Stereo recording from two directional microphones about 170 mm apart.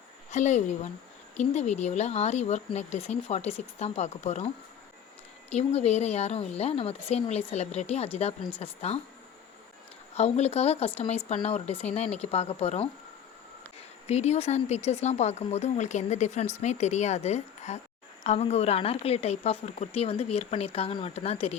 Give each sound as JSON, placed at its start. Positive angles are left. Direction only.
{"t": 0.3, "sound": "speech", "side_deg": 45}
{"t": 5.5, "sound": "speech", "side_deg": 40}
{"t": 10.2, "sound": "speech", "side_deg": 40}
{"t": 14.1, "sound": "speech", "side_deg": 40}